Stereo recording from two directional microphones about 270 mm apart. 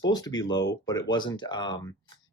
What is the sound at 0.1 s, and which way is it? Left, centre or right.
Speech, centre.